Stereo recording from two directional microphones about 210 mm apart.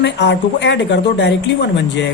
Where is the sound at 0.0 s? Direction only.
55° left (ahead or behind).